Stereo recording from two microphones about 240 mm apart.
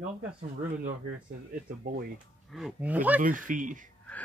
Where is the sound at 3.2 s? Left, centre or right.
Right.